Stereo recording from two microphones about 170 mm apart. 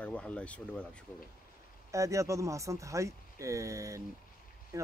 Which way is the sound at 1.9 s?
20° right (ahead or behind).